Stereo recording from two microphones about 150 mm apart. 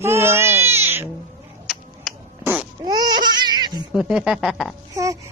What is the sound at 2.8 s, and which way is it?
Babbling, 25° right (ahead or behind).